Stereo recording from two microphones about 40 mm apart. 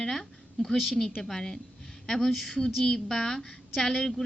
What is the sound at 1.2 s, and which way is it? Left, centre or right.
A woman's voice, centre.